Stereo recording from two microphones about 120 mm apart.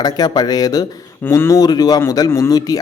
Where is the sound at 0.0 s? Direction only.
35° left (ahead or behind).